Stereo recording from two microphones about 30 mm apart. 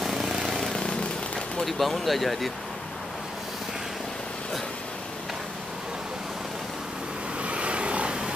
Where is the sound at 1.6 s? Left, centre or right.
Centre.